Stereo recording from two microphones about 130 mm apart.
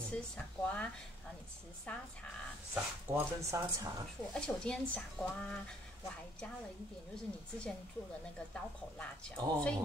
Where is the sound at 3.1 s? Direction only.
25° right (ahead or behind).